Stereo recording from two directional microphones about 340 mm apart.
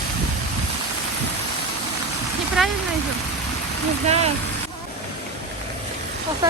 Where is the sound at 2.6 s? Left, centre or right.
Centre.